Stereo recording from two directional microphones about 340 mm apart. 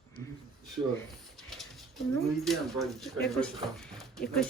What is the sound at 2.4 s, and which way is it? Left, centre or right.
Speech, centre.